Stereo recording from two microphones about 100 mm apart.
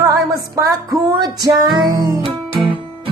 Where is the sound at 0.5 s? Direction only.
30° right (ahead or behind).